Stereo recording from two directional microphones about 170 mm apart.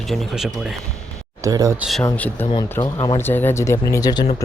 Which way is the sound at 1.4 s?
20° right (ahead or behind).